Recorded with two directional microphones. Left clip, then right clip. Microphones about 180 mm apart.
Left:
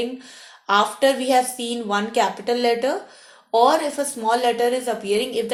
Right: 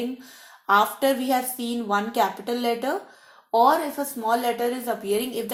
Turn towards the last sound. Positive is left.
turn(degrees=-35)  # may be behind; listen again after turning